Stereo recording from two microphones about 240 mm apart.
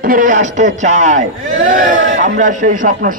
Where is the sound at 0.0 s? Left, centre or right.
Right.